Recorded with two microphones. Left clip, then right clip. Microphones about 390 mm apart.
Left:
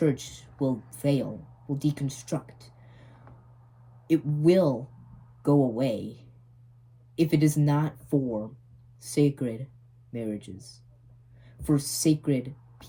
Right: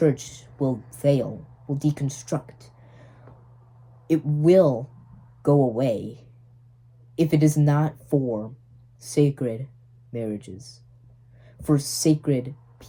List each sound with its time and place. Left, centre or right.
0.0 s speech: centre
7.2 s speech: centre